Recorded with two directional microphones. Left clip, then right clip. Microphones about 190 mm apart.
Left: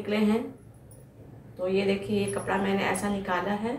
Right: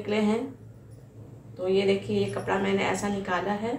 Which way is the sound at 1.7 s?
10° right (ahead or behind).